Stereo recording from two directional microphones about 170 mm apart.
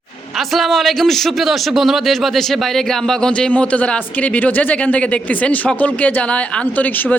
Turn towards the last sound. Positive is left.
turn(degrees=10)  # may be behind; listen again after turning